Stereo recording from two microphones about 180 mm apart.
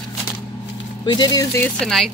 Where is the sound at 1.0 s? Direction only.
25° left (ahead or behind).